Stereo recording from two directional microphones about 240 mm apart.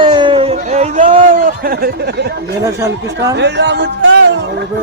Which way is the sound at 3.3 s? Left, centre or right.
Right.